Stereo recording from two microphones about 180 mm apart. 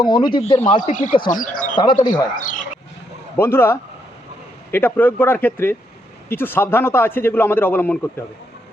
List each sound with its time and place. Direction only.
0.0 s speech: 25° left (ahead or behind)
1.3 s speech: 45° left (ahead or behind)
1.8 s speech: 25° left (ahead or behind)
2.3 s speech: 45° left (ahead or behind)
3.3 s a man's voice: 15° left (ahead or behind)